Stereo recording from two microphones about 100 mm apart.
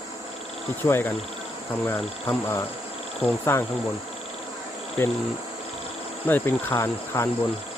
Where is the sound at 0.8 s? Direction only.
20° left (ahead or behind).